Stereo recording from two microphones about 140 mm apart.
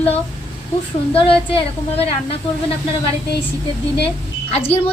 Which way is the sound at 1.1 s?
45° left (ahead or behind).